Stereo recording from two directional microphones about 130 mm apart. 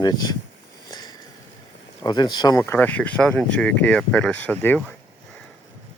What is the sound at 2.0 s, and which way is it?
Speech, 30° left (ahead or behind).